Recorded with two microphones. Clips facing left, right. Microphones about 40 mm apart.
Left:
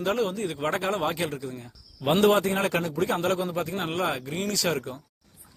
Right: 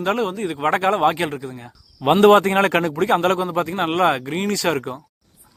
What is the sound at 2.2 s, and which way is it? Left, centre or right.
Speech, right.